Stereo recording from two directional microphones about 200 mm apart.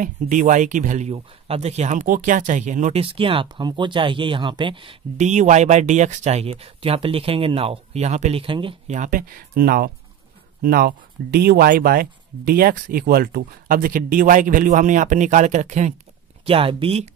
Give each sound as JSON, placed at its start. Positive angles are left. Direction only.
{"t": 0.0, "sound": "speech", "side_deg": -40}
{"t": 5.1, "sound": "speech", "side_deg": -35}
{"t": 8.9, "sound": "speech", "side_deg": -40}